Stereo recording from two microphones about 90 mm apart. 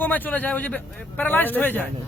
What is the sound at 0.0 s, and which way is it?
A man's voice, 20° left (ahead or behind).